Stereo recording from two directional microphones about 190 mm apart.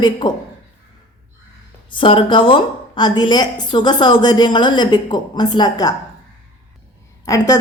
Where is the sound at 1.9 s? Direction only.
25° left (ahead or behind).